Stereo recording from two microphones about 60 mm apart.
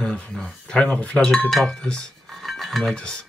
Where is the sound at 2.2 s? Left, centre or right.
Centre.